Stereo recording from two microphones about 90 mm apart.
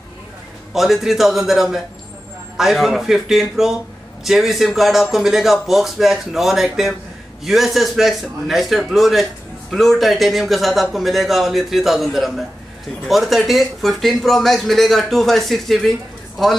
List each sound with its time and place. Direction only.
0.7 s a man's voice: centre (ahead or behind)